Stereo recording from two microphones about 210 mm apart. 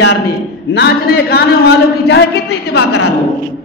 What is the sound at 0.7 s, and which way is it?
Speech, 50° left (ahead or behind).